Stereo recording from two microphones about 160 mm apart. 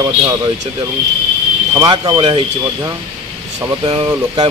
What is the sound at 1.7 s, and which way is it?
Speech, 30° right (ahead or behind).